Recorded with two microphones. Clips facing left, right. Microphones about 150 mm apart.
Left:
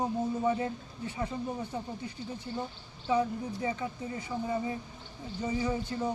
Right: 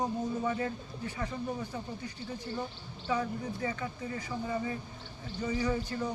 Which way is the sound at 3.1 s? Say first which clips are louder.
Left 4 dB; 20° left (ahead or behind).